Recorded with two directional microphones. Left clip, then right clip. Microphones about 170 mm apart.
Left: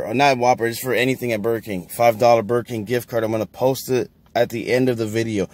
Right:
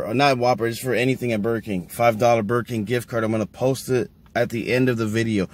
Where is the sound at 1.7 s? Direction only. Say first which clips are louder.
Left 3 dB; 50° left (ahead or behind).